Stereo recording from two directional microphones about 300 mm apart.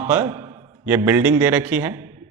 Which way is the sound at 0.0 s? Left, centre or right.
Centre.